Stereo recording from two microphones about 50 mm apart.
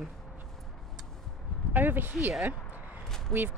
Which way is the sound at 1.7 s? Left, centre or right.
Right.